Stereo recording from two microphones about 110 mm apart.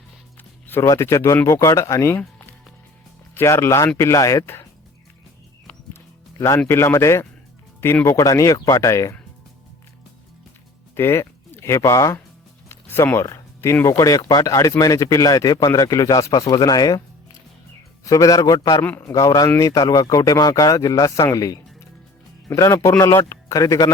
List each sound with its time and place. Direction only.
0.7 s a man's voice: 25° left (ahead or behind)
6.7 s a man's voice: 25° left (ahead or behind)
10.9 s speech: 25° left (ahead or behind)
12.6 s a sound: 20° left (ahead or behind)
13.8 s speech: 30° left (ahead or behind)
18.0 s speech: 30° left (ahead or behind)
18.9 s a man's voice: 20° left (ahead or behind)
19.1 s speech: 35° left (ahead or behind)
21.3 s music: 35° left (ahead or behind)
22.4 s a man's voice: 30° left (ahead or behind)